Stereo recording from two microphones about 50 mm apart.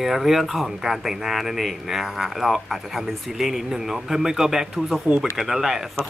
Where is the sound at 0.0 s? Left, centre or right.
Centre.